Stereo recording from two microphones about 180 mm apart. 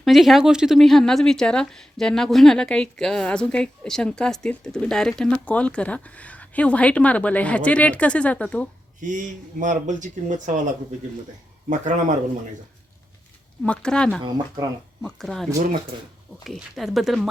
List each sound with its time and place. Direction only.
0.0 s speech: centre (ahead or behind)
9.0 s speech: 45° right (ahead or behind)
11.7 s speech: 45° right (ahead or behind)
13.6 s speech: 5° left (ahead or behind)
14.2 s speech: 20° right (ahead or behind)
15.0 s speech: centre (ahead or behind)